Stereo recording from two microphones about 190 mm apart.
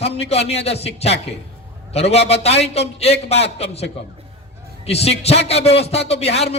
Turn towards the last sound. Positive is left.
turn(degrees=35)  # may be behind; listen again after turning